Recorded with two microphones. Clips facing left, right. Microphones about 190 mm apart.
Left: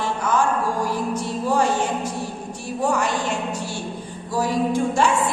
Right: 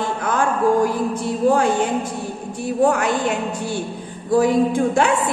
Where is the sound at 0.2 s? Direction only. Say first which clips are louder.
Right 2 dB; 55° right (ahead or behind).